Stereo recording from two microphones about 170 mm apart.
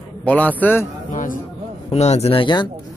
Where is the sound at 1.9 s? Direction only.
40° left (ahead or behind).